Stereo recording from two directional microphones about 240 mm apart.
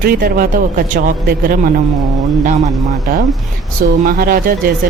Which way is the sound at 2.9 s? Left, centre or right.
Right.